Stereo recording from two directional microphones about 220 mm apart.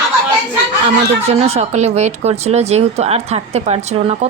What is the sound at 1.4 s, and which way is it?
Speech, 30° right (ahead or behind).